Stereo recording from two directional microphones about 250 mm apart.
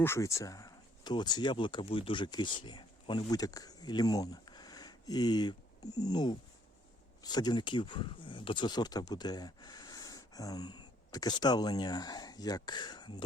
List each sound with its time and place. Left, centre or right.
0.0 s speech: centre